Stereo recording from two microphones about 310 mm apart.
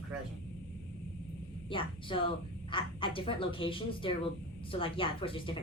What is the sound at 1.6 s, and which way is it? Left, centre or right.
Speech, centre.